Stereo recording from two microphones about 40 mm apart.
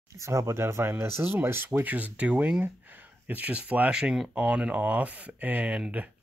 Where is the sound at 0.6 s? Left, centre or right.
Right.